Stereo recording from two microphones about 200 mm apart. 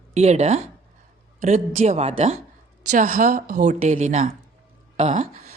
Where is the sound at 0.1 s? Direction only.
35° right (ahead or behind).